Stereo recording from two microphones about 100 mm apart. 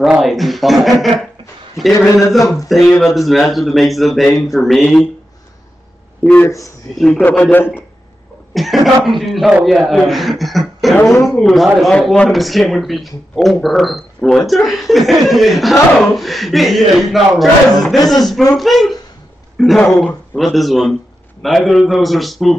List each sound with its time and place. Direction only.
0.0 s speech: centre (ahead or behind)
6.4 s a man's voice: 35° left (ahead or behind)
7.5 s a man's voice: 20° left (ahead or behind)
8.5 s speech: centre (ahead or behind)